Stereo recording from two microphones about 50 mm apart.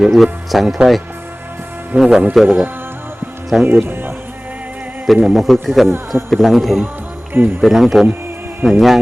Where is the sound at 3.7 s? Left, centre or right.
Right.